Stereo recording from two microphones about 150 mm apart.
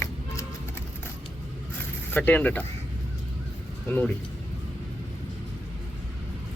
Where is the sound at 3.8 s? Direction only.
10° left (ahead or behind).